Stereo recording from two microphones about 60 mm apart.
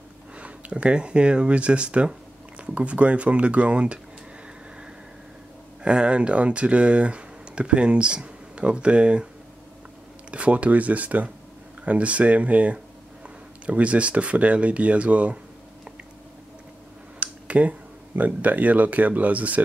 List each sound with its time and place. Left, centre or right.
0.4 s speech: right
5.9 s speech: centre
10.3 s speech: right
17.2 s speech: right